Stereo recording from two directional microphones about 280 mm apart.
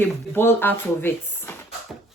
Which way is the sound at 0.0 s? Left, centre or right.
Centre.